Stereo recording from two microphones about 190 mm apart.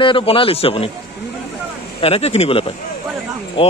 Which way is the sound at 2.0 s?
30° left (ahead or behind).